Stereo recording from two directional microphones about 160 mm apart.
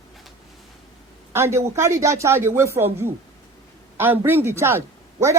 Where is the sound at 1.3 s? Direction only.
15° right (ahead or behind).